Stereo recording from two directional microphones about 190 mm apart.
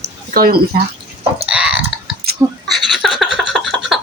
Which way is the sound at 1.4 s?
5° right (ahead or behind).